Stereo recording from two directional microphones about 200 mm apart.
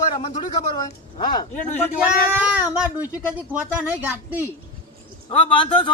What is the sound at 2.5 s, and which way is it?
Speech, 5° right (ahead or behind).